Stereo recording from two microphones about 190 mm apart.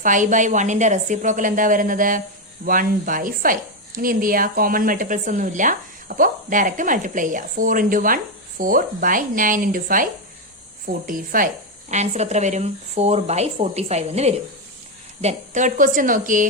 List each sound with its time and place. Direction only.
0.0 s a woman's voice: 40° right (ahead or behind)